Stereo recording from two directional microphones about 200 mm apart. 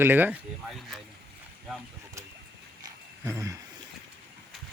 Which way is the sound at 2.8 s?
15° right (ahead or behind).